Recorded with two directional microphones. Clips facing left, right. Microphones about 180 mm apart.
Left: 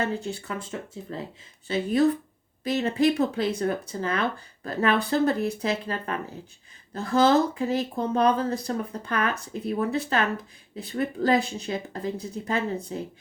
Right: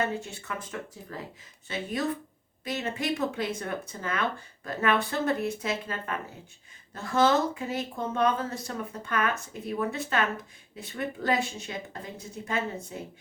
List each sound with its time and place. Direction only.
0.0 s speech: 35° left (ahead or behind)